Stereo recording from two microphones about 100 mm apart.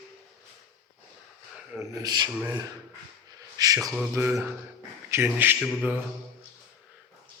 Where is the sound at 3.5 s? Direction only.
35° right (ahead or behind).